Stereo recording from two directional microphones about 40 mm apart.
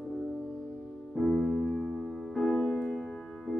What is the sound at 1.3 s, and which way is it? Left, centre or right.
Music, centre.